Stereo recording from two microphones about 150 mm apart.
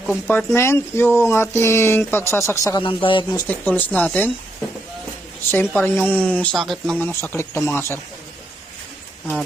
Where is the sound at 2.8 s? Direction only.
35° left (ahead or behind).